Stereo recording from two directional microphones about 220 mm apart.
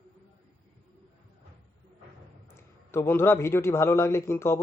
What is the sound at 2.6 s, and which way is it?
Speech, 10° left (ahead or behind).